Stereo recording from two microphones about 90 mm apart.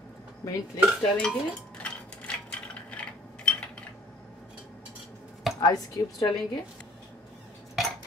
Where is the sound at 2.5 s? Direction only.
15° left (ahead or behind).